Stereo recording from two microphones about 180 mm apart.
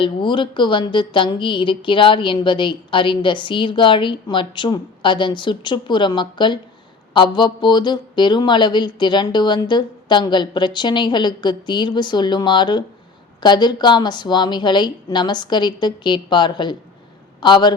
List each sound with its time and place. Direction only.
0.0 s a woman's voice: 25° left (ahead or behind)